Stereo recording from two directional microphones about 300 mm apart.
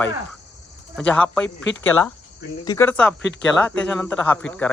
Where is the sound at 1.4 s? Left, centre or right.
Left.